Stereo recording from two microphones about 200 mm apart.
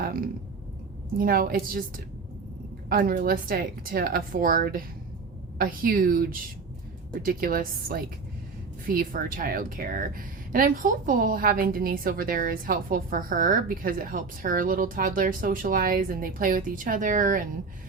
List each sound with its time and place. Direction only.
0.0 s a sound: 50° right (ahead or behind)
1.2 s speech: 45° right (ahead or behind)
2.9 s speech: 45° right (ahead or behind)